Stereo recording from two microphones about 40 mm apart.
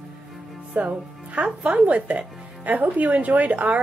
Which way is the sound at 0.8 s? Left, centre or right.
Right.